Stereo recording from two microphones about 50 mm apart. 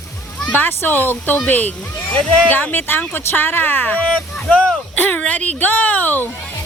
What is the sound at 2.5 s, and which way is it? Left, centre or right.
Speech, left.